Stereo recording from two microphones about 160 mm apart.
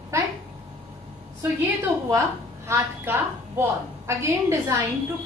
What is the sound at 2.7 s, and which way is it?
A woman's voice, 15° right (ahead or behind).